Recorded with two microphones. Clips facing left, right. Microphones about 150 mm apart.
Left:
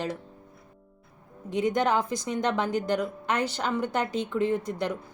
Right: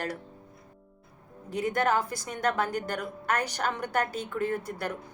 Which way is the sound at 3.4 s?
10° right (ahead or behind).